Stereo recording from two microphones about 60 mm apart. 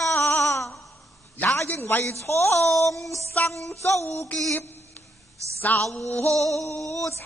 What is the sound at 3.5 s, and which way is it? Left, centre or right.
Male singing, left.